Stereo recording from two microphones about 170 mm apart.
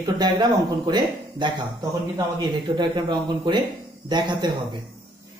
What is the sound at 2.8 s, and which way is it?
Speech, 25° right (ahead or behind).